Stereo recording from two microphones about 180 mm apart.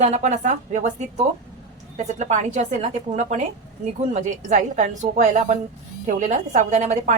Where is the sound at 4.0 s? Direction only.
40° right (ahead or behind).